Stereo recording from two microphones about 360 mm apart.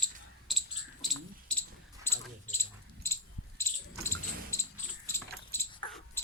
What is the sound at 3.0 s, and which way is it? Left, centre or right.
Rattle, centre.